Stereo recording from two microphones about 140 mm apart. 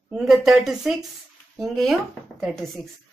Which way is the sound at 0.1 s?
5° right (ahead or behind).